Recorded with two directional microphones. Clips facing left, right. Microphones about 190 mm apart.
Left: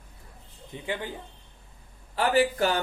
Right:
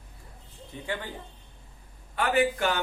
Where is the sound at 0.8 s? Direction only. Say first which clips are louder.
Left 2 dB; 15° left (ahead or behind).